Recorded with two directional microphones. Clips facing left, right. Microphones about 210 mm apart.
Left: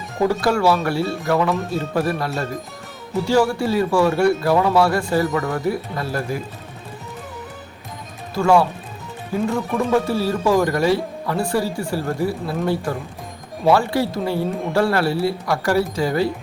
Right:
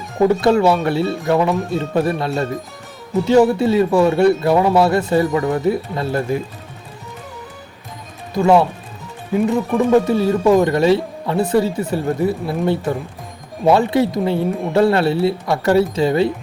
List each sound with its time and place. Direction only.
0.3 s speech: 20° right (ahead or behind)
8.4 s speech: 20° right (ahead or behind)